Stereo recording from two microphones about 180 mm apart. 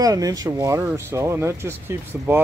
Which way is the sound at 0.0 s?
20° right (ahead or behind).